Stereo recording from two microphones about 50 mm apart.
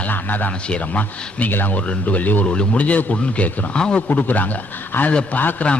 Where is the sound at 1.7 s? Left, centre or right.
Left.